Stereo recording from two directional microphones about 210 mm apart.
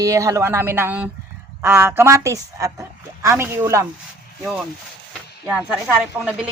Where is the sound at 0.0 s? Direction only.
15° right (ahead or behind).